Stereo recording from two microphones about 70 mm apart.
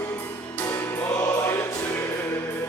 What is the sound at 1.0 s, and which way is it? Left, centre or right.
Choir, left.